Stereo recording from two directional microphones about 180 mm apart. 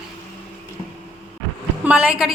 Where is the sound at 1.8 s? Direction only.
10° right (ahead or behind).